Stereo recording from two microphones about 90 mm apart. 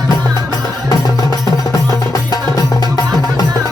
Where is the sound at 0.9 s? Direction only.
40° left (ahead or behind).